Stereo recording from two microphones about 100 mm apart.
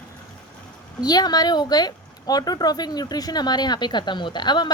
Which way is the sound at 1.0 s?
40° left (ahead or behind).